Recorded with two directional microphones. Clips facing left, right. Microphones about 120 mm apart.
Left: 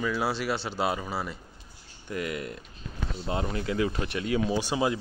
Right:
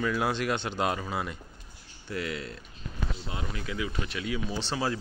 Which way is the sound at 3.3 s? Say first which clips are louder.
Left 11 dB; 35° left (ahead or behind).